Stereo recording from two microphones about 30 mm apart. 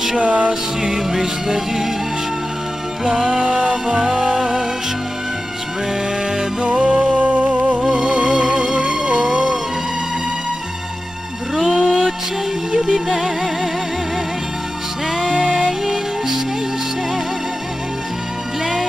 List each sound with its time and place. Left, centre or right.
0.2 s music: right
0.5 s music: centre
3.0 s music: centre
6.7 s music: right
7.2 s music: right
7.8 s music: centre
8.1 s music: right
9.3 s music: right
11.5 s music: centre
15.1 s music: centre